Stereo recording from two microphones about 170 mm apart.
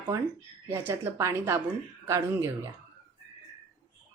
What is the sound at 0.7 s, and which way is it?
A woman's voice, 15° right (ahead or behind).